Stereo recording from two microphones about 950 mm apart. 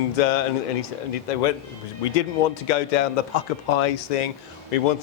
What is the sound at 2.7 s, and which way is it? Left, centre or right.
Speech, left.